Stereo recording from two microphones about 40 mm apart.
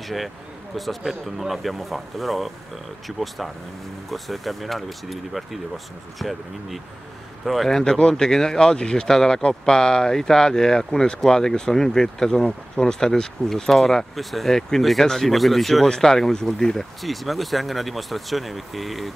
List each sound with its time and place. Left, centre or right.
0.0 s speech: centre
7.7 s speech: centre
17.0 s speech: centre